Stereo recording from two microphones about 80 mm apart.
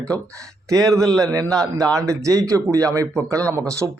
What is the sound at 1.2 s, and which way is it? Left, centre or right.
Speech, right.